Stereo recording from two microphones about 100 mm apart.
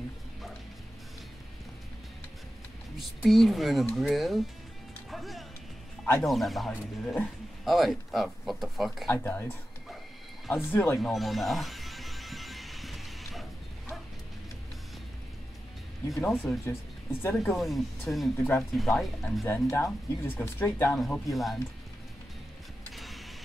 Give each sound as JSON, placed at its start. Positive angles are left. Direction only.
{"t": 3.0, "sound": "speech", "side_deg": 0}
{"t": 5.1, "sound": "music", "side_deg": 0}
{"t": 6.2, "sound": "speech", "side_deg": 0}
{"t": 9.1, "sound": "speech", "side_deg": 25}
{"t": 10.6, "sound": "speech", "side_deg": 20}
{"t": 11.0, "sound": "music", "side_deg": 0}
{"t": 16.3, "sound": "speech", "side_deg": 0}
{"t": 16.6, "sound": "speech", "side_deg": 25}
{"t": 17.6, "sound": "speech", "side_deg": 0}
{"t": 19.4, "sound": "speech", "side_deg": 25}
{"t": 21.3, "sound": "speech", "side_deg": 0}
{"t": 22.9, "sound": "vehicle", "side_deg": 0}